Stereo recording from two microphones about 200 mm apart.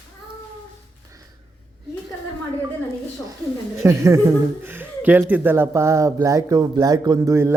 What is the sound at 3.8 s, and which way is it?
A man's voice, 15° right (ahead or behind).